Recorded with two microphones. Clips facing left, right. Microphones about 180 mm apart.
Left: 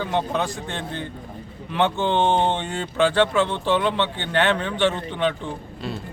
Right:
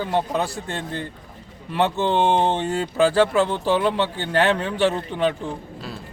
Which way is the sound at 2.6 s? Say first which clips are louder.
Right 2 dB; 40° right (ahead or behind).